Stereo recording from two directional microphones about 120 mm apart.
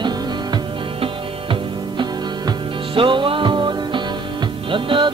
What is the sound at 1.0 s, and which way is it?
Music, 45° right (ahead or behind).